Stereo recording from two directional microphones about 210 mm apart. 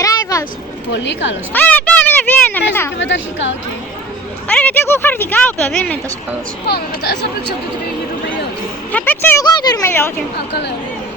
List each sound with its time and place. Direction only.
0.0 s a sound: 15° left (ahead or behind)
0.9 s a woman's voice: 60° left (ahead or behind)
1.5 s a sound: 5° left (ahead or behind)
3.0 s a woman's voice: 60° left (ahead or behind)
4.4 s speech: 5° left (ahead or behind)
6.7 s speech: 50° left (ahead or behind)
8.9 s speech: 10° left (ahead or behind)
10.3 s speech: 55° left (ahead or behind)